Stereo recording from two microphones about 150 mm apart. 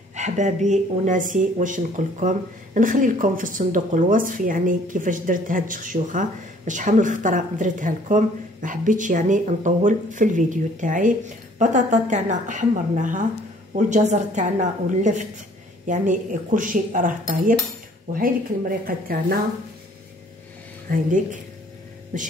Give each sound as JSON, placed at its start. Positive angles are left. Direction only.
{"t": 0.1, "sound": "speech", "side_deg": -50}
{"t": 20.9, "sound": "speech", "side_deg": -65}
{"t": 22.1, "sound": "speech", "side_deg": -60}